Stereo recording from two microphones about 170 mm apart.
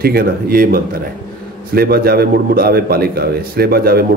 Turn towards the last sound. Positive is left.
turn(degrees=-65)  # may be behind; listen again after turning